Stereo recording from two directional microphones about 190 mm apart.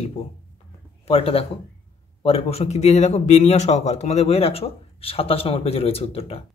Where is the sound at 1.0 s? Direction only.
30° left (ahead or behind).